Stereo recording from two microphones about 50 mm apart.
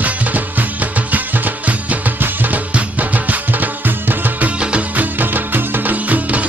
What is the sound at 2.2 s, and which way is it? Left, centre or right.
Music, right.